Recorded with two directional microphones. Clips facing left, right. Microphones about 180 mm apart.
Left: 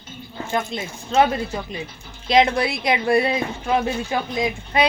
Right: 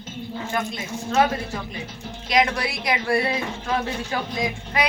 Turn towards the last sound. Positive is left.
turn(degrees=20)  # may be behind; listen again after turning